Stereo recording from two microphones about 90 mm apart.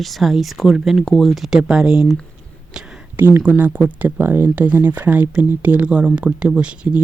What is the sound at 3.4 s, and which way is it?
Speech, 20° right (ahead or behind).